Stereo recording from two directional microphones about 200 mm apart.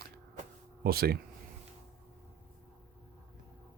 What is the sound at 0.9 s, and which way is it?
Speech, 50° right (ahead or behind).